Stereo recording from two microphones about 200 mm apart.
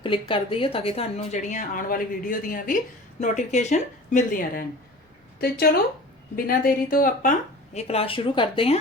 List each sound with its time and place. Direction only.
0.0 s a woman's voice: 25° left (ahead or behind)